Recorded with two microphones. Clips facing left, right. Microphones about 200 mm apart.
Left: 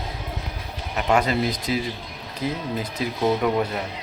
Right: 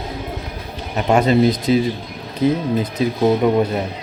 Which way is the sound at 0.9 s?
25° right (ahead or behind).